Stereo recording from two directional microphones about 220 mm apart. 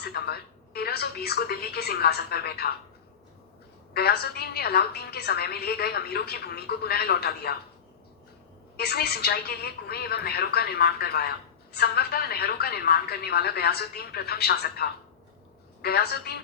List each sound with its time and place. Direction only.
0.0 s a woman's voice: 45° left (ahead or behind)
3.9 s a woman's voice: 45° left (ahead or behind)
8.7 s a woman's voice: 45° left (ahead or behind)